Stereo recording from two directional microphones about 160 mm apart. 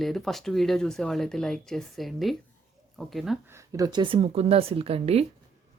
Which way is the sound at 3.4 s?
20° right (ahead or behind).